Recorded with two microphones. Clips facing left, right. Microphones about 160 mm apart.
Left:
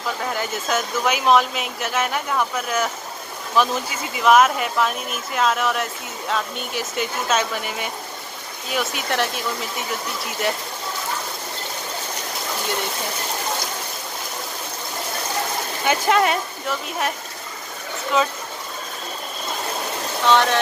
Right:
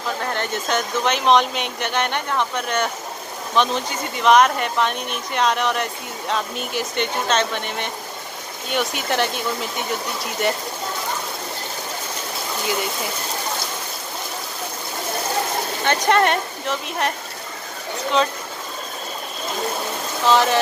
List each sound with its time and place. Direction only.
0.2 s speech: 5° left (ahead or behind)
15.8 s speech: 5° left (ahead or behind)
20.2 s speech: centre (ahead or behind)